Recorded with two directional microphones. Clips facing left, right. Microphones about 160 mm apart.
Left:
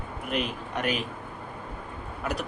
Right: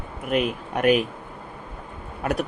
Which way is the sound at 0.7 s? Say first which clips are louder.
Right 10 dB; 60° right (ahead or behind).